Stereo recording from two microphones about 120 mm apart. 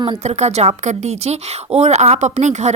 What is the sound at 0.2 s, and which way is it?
A woman's voice, 70° right (ahead or behind).